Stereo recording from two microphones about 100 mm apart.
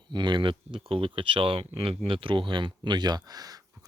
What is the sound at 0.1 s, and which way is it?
Speech, 50° right (ahead or behind).